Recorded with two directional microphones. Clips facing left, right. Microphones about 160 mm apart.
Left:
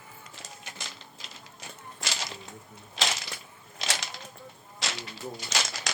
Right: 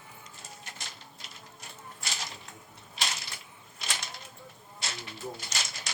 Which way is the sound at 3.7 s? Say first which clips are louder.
Left 4 dB; 90° left.